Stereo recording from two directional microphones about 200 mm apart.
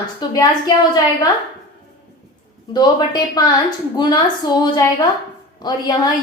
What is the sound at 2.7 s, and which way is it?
A woman's voice, 20° left (ahead or behind).